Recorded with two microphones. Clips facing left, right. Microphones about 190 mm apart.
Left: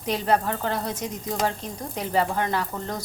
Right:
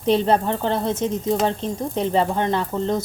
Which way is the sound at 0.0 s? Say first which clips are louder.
Right 5 dB; 25° right (ahead or behind).